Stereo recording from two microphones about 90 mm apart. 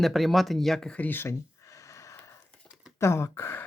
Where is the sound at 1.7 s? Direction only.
35° left (ahead or behind).